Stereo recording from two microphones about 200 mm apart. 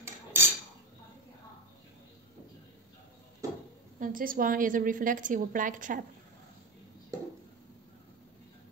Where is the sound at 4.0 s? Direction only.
45° right (ahead or behind).